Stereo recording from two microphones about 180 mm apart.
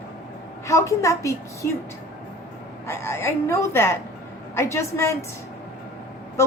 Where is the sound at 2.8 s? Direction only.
15° left (ahead or behind).